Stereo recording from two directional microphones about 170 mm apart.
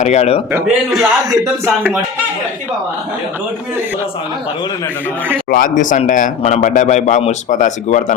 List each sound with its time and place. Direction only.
0.0 s a man's voice: 40° left (ahead or behind)
0.9 s speech: 20° right (ahead or behind)
5.5 s a man's voice: 50° left (ahead or behind)